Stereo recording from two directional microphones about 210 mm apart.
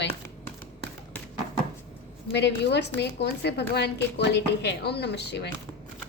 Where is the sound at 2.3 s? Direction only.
55° left (ahead or behind).